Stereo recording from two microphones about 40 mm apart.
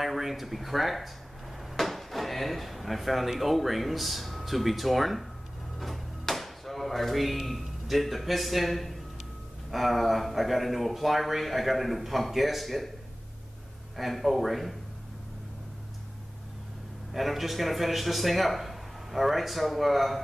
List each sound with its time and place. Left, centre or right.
0.0 s speech: centre
5.8 s drawer open or close: centre
9.7 s speech: centre
13.9 s speech: centre
17.1 s speech: centre